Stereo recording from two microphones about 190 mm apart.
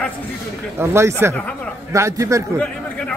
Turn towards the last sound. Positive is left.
turn(degrees=5)  # may be behind; listen again after turning